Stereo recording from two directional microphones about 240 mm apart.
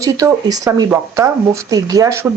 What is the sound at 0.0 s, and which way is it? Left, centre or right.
Speech, centre.